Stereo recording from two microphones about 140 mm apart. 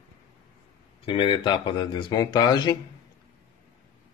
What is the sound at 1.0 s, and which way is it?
Speech, 35° left (ahead or behind).